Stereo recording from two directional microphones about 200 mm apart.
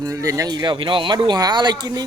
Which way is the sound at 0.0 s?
15° right (ahead or behind).